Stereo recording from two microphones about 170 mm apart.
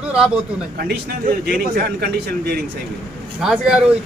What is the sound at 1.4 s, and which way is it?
A man's voice, 65° right (ahead or behind).